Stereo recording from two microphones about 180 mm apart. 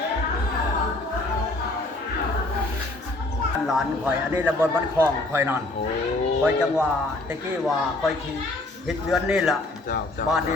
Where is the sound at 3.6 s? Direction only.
Centre (ahead or behind).